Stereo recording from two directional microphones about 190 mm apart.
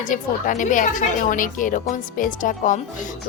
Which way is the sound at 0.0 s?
40° left (ahead or behind).